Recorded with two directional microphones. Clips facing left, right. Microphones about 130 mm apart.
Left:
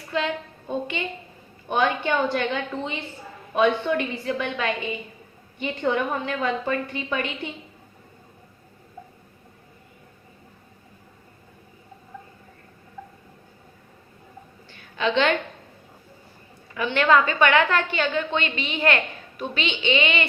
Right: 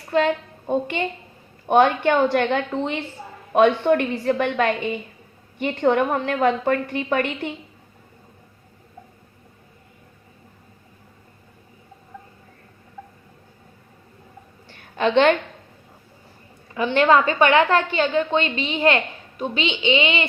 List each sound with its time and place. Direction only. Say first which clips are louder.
0.1 s a woman's voice: right 7 dB; 50° right (ahead or behind)
1.6 s a woman's voice: right 7 dB; 65° right (ahead or behind)
14.9 s a woman's voice: right 5 dB; 50° right (ahead or behind)
16.7 s a woman's voice: right 3 dB; 30° right (ahead or behind)